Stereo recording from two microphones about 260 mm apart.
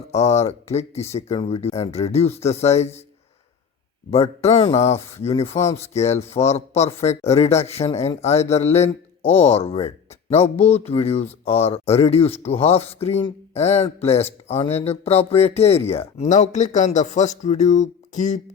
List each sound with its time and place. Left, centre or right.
0.1 s speech: left
4.1 s speech: left